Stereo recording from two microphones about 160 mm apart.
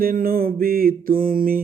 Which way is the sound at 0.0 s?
65° right (ahead or behind).